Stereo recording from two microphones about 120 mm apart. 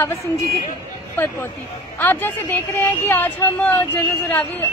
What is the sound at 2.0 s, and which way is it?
Speech, 15° left (ahead or behind).